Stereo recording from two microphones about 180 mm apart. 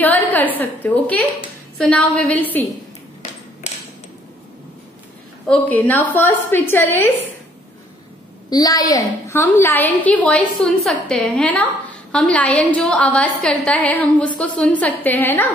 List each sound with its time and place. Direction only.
0.0 s a woman's voice: 10° left (ahead or behind)
5.5 s a woman's voice: 10° left (ahead or behind)
8.5 s a woman's voice: 20° left (ahead or behind)